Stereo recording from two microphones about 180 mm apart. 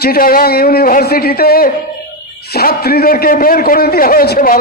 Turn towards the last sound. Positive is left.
turn(degrees=55)  # may be behind; listen again after turning